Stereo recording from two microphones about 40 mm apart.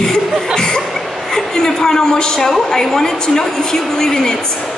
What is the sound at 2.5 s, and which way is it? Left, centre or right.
A woman's voice, centre.